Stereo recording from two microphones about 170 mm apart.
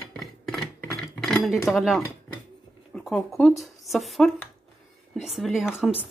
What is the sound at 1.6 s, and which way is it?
Speech, centre (ahead or behind).